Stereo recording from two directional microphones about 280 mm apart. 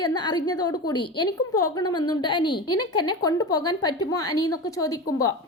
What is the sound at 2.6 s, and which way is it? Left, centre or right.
Speech, left.